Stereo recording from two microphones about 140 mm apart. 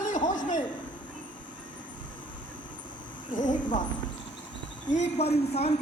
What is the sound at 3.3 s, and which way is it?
Speech, 65° left (ahead or behind).